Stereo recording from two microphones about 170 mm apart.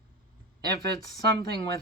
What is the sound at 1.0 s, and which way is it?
Speech, 20° left (ahead or behind).